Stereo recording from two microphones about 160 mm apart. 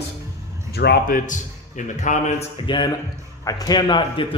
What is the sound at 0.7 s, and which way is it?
A man's voice, 80° left.